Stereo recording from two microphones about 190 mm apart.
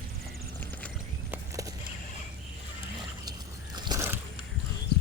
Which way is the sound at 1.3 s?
15° right (ahead or behind).